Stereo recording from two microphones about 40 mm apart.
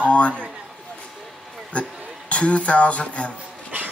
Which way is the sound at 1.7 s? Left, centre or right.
Left.